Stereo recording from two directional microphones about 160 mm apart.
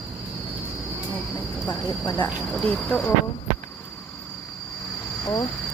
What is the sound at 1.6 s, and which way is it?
Speech, 15° left (ahead or behind).